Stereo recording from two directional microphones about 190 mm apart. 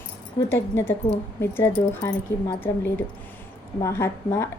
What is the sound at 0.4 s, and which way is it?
A woman's voice, 15° left (ahead or behind).